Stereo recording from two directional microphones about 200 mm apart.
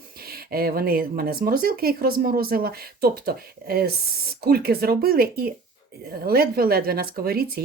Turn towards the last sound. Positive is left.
turn(degrees=-50)  # may be behind; listen again after turning